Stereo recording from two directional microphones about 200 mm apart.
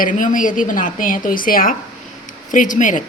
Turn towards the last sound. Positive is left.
turn(degrees=40)  # may be behind; listen again after turning